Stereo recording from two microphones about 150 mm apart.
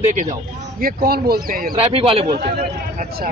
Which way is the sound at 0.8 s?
85° right.